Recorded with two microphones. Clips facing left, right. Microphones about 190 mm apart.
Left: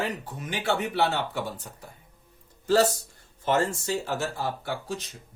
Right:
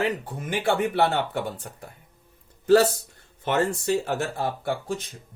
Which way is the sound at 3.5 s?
60° right (ahead or behind).